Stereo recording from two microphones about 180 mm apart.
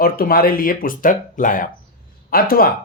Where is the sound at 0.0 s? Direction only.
55° left (ahead or behind).